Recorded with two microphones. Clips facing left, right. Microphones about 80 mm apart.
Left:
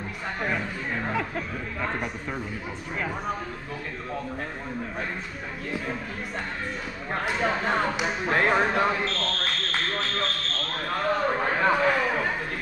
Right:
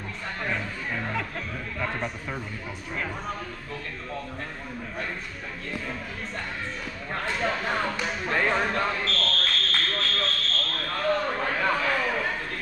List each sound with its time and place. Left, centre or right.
0.4 s speech: centre
7.1 s speech: centre
9.0 s speech: centre
9.5 s a sound: centre